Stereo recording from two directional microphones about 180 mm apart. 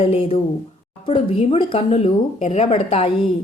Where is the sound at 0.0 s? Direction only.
35° left (ahead or behind).